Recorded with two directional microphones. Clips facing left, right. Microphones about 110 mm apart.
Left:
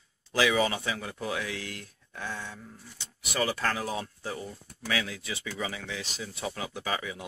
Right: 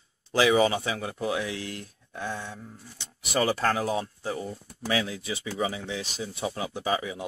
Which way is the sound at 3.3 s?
35° right (ahead or behind).